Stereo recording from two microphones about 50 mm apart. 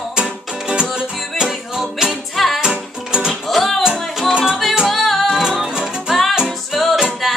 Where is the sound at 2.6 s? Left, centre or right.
Centre.